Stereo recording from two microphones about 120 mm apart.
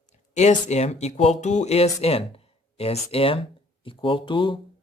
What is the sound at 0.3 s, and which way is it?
Speech, 70° left (ahead or behind).